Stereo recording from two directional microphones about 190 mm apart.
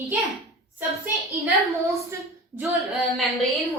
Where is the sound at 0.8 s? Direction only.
10° right (ahead or behind).